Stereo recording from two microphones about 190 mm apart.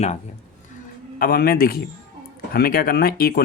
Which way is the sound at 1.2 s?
50° left (ahead or behind).